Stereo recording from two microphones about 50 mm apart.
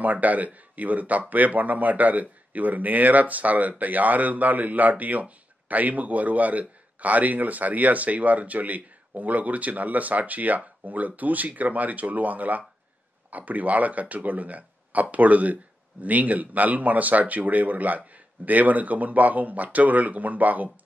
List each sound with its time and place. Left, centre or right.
0.0 s speech: right